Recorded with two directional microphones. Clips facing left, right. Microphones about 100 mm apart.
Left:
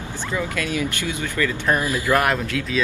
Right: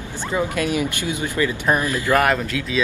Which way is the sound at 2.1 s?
Centre (ahead or behind).